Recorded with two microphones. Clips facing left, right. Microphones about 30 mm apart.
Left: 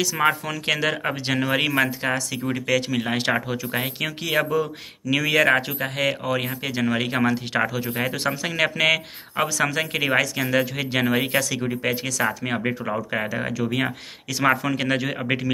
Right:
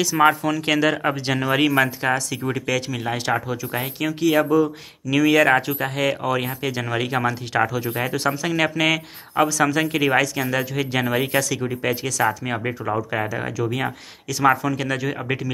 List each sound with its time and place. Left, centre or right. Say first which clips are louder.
0.0 s a man's voice: right 4 dB; centre
3.0 s a man's voice: even; left; by 12.3 s centre
13.6 s speech: right 1 dB; left